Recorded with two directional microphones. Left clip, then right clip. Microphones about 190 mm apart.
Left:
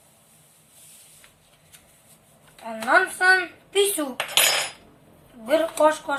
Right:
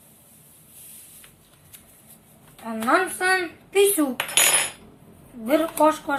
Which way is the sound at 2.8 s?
10° right (ahead or behind).